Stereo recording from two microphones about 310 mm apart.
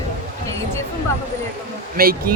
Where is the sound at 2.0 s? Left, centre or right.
Right.